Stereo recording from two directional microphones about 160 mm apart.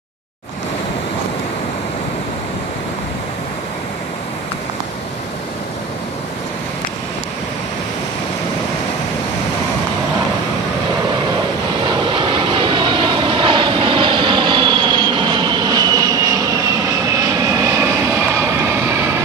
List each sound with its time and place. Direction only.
12.2 s vehicle: 30° right (ahead or behind)